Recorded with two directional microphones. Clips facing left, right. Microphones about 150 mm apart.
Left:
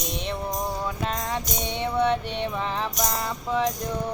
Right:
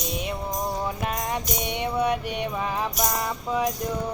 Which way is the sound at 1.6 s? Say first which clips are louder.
Left 2 dB; 15° right (ahead or behind).